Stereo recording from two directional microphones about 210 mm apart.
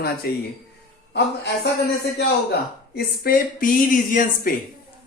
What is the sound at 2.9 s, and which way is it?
Speech, 45° left (ahead or behind).